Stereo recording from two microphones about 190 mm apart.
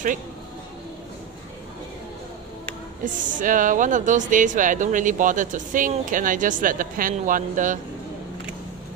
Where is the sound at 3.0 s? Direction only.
45° right (ahead or behind).